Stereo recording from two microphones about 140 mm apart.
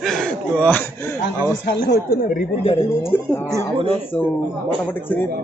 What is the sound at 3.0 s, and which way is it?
A man's voice, 15° left (ahead or behind).